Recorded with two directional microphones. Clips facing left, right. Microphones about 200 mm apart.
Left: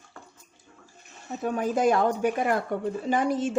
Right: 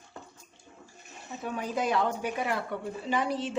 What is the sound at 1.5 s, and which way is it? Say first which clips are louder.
Speech: left 7 dB; 45° left (ahead or behind).